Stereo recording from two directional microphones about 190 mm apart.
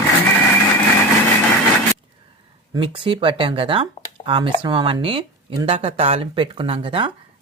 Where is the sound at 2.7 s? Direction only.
25° right (ahead or behind).